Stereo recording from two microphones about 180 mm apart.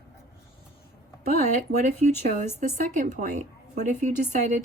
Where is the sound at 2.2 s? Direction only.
45° right (ahead or behind).